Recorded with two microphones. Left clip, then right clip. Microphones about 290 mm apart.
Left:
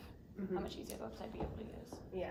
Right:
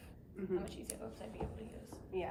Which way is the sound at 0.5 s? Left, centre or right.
Centre.